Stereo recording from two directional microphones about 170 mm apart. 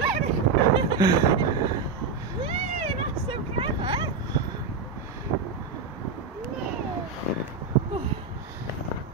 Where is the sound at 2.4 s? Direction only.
35° right (ahead or behind).